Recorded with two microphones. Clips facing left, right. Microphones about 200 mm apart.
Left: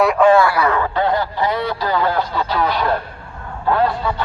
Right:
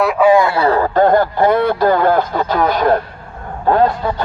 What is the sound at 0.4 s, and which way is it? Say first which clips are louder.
Speech: right 3 dB; 30° right (ahead or behind).